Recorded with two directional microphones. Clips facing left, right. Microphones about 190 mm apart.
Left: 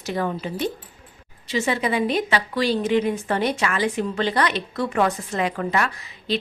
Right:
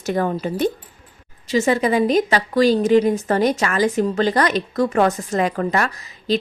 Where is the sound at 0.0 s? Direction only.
45° right (ahead or behind).